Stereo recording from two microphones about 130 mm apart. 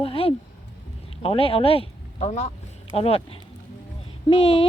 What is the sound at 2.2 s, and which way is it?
Speech, 65° left (ahead or behind).